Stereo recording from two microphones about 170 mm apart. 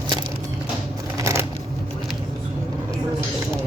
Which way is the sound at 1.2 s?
15° right (ahead or behind).